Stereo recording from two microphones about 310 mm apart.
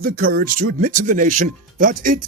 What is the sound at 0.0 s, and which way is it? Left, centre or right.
A man's voice, right.